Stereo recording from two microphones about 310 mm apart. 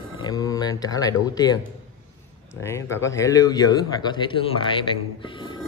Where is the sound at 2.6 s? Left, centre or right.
Centre.